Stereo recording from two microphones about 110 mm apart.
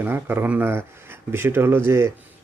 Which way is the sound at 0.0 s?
20° right (ahead or behind).